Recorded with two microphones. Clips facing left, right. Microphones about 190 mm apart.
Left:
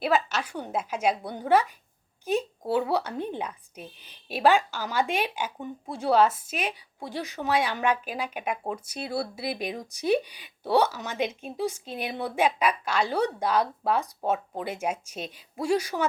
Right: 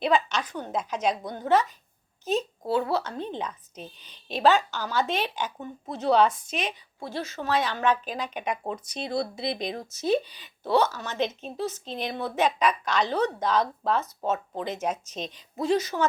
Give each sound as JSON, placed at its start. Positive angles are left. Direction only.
{"t": 0.0, "sound": "speech", "side_deg": 5}